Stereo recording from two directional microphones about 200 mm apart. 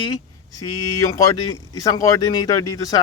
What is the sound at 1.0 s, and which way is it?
A man's voice, 15° left (ahead or behind).